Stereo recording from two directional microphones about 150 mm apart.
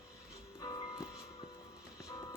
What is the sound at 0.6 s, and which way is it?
Music, 25° left (ahead or behind).